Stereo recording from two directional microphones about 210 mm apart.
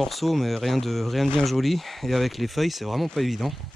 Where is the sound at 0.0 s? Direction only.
Centre (ahead or behind).